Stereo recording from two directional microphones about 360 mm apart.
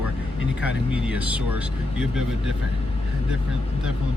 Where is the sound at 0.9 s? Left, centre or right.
Centre.